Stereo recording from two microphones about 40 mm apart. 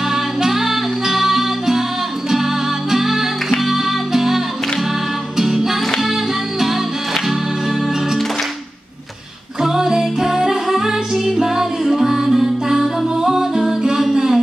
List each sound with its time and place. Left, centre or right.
0.1 s music: centre
5.4 s music: centre
9.6 s music: centre